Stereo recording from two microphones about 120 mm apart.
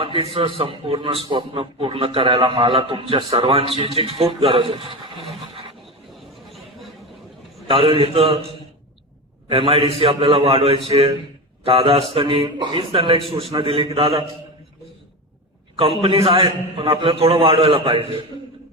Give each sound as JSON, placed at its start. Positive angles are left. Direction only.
{"t": 0.0, "sound": "a man's voice", "side_deg": -50}
{"t": 7.7, "sound": "a man's voice", "side_deg": -45}
{"t": 9.5, "sound": "a man's voice", "side_deg": -50}
{"t": 12.1, "sound": "a man's voice", "side_deg": -50}
{"t": 16.0, "sound": "a man's voice", "side_deg": -45}